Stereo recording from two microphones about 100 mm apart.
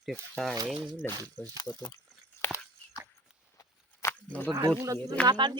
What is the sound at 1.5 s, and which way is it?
Speech, 45° left (ahead or behind).